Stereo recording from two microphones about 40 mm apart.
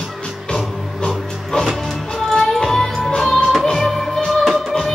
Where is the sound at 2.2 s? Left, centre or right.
Centre.